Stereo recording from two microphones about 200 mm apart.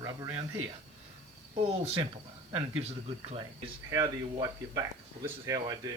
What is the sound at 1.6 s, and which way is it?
Speech, 30° right (ahead or behind).